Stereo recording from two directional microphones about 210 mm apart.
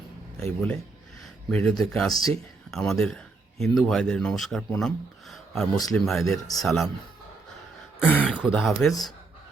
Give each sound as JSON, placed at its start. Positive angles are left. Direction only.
{"t": 0.3, "sound": "speech", "side_deg": 5}
{"t": 8.0, "sound": "speech", "side_deg": 5}
{"t": 8.3, "sound": "speech", "side_deg": -5}